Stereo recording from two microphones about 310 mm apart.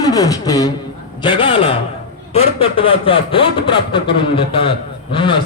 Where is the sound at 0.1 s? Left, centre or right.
Centre.